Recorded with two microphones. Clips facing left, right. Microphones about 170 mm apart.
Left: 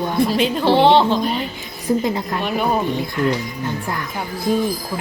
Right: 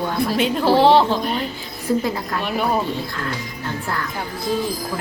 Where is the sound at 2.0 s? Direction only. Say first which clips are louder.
Left 2 dB; 20° left (ahead or behind).